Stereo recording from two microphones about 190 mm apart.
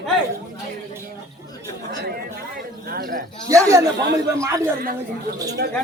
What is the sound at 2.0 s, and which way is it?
Chatter, 55° right (ahead or behind).